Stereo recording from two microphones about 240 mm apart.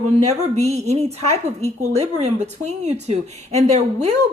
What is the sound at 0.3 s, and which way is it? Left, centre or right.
A woman's voice, right.